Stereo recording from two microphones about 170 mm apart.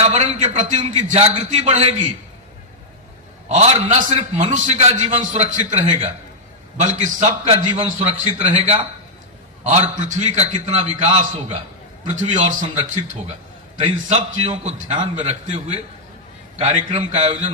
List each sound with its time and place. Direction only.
0.0 s a man's voice: 40° right (ahead or behind)
3.5 s a man's voice: 45° right (ahead or behind)
9.9 s a man's voice: 45° right (ahead or behind)